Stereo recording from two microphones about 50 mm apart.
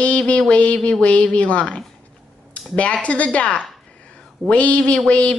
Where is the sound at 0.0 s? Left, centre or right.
Left.